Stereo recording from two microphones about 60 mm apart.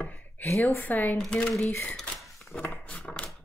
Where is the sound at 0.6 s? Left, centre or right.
Left.